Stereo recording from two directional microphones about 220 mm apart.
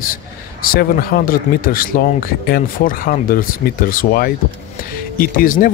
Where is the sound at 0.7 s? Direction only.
40° left (ahead or behind).